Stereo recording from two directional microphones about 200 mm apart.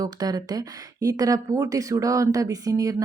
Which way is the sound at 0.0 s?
20° right (ahead or behind).